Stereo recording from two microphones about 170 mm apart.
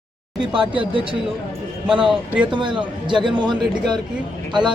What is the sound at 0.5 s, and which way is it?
Speech, 30° right (ahead or behind).